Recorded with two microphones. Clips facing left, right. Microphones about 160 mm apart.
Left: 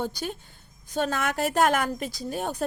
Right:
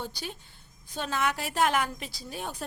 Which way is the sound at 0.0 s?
45° left (ahead or behind).